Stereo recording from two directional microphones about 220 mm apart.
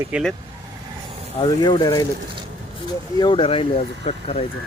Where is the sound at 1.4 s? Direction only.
20° left (ahead or behind).